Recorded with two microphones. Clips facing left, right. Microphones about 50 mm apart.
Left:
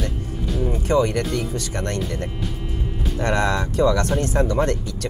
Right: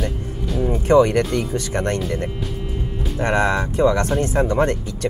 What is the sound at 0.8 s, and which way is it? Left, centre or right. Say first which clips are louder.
Speech: right 6 dB; right.